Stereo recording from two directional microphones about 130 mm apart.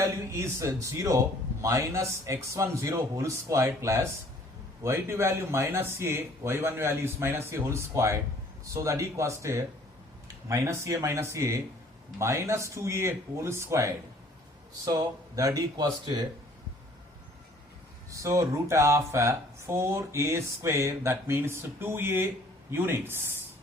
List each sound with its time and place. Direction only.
0.0 s speech: 20° right (ahead or behind)
18.1 s speech: 25° right (ahead or behind)